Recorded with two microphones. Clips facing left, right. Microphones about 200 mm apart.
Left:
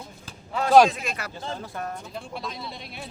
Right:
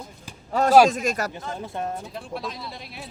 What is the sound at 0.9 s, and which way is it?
Speech, 45° right (ahead or behind).